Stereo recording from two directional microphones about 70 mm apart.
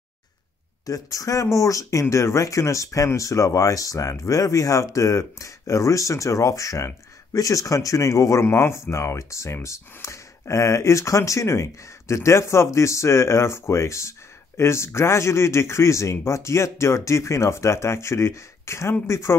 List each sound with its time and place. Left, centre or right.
0.8 s speech: left
8.5 s speech: left